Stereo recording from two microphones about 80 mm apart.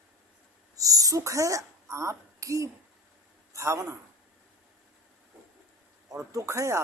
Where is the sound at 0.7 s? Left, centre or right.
Right.